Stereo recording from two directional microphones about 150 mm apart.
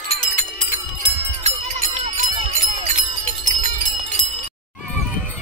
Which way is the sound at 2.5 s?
50° right (ahead or behind).